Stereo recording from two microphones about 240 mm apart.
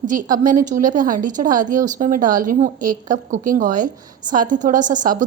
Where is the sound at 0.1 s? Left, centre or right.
Right.